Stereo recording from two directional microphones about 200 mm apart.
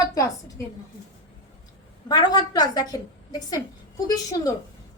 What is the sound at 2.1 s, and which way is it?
A woman's voice, 20° left (ahead or behind).